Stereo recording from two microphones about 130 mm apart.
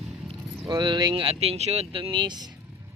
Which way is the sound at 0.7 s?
35° right (ahead or behind).